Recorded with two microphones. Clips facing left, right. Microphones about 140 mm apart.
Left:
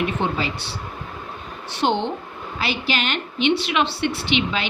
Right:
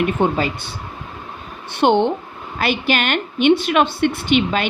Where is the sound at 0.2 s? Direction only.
50° right (ahead or behind).